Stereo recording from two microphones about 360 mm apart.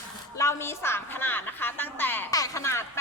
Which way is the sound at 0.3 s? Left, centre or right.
Centre.